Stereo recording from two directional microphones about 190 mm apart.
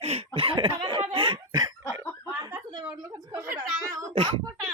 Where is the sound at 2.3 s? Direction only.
10° right (ahead or behind); by 4.4 s 25° right (ahead or behind).